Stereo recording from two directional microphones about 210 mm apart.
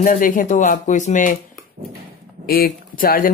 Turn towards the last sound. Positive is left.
turn(degrees=40)  # may be behind; listen again after turning